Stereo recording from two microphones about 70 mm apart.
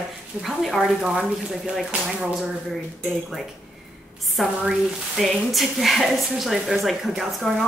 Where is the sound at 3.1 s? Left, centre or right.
Centre.